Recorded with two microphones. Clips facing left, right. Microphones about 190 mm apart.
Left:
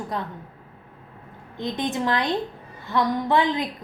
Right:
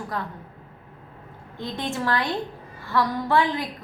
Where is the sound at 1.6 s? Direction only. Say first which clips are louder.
Left 3 dB; 20° left (ahead or behind).